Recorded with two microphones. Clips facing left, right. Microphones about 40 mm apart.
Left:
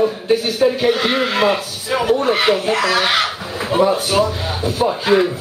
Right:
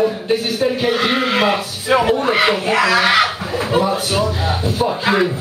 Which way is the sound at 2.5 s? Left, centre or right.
Right.